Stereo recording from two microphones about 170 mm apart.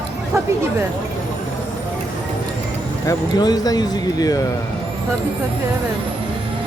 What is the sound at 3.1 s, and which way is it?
Speech, 25° left (ahead or behind).